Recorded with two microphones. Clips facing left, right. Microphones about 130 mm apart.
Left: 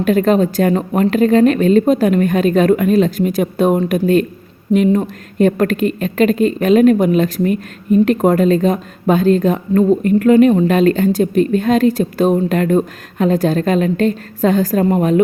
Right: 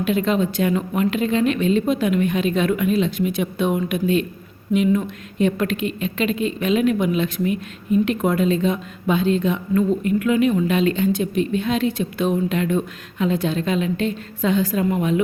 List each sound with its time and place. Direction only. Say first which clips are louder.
0.0 s a woman's voice: left 7 dB; 45° left (ahead or behind)